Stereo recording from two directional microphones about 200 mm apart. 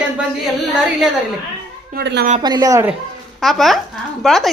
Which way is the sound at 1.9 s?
55° right (ahead or behind).